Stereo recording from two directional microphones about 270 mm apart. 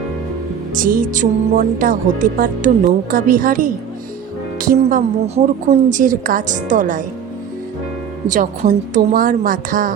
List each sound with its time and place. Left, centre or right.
0.7 s a woman's voice: right
8.3 s a woman's voice: right